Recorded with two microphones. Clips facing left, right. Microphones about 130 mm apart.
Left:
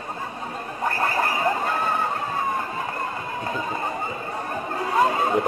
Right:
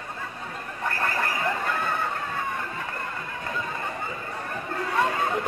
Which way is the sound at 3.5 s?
30° left (ahead or behind).